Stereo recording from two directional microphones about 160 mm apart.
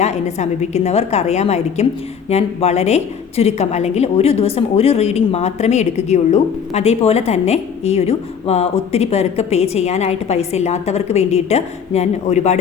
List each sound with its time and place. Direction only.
0.0 s a woman's voice: 45° left (ahead or behind)